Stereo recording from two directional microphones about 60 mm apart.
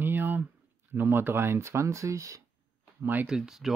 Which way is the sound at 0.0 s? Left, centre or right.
Right.